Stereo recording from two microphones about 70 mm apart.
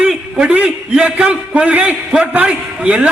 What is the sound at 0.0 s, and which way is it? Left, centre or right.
A man's voice, centre.